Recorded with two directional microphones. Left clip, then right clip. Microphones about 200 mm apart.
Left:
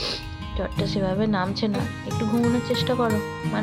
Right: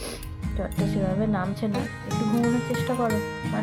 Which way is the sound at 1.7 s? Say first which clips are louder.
Left 1 dB; centre (ahead or behind).